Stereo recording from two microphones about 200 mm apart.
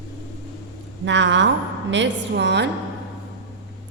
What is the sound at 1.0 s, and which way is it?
A woman's voice, 65° right (ahead or behind).